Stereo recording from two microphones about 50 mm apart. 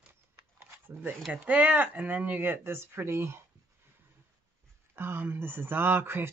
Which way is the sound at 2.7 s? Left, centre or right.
Right.